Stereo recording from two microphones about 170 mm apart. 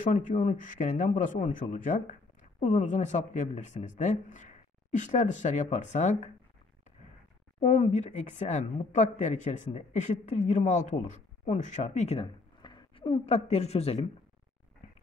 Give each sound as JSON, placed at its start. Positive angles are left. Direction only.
{"t": 0.0, "sound": "speech", "side_deg": 50}
{"t": 7.6, "sound": "speech", "side_deg": 45}